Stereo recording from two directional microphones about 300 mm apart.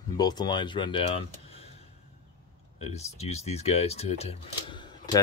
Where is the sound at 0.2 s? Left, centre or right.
Centre.